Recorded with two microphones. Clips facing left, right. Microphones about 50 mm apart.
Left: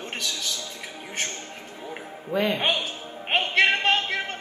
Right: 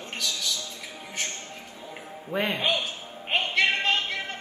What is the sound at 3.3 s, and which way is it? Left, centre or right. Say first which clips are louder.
Music: left 3 dB; left.